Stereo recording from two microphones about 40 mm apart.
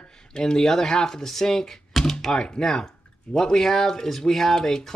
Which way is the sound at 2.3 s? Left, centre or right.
Centre.